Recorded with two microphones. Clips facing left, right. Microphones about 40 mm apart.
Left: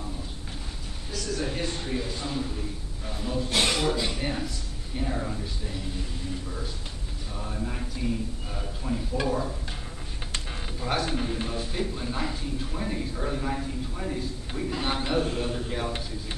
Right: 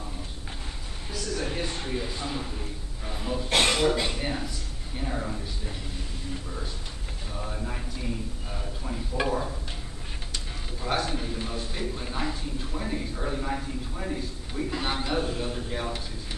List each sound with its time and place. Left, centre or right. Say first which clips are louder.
1.1 s a sound: even; centre
3.1 s speech: left 1 dB; centre
3.4 s speech: right 3 dB; right
3.8 s speech: right 2 dB; centre
4.2 s speech: left 1 dB; centre
7.3 s speech: left 1 dB; centre
9.1 s speech: right 1 dB; centre
10.8 s speech: even; centre
11.1 s speech: left 3 dB; centre
11.4 s speech: left 2 dB; centre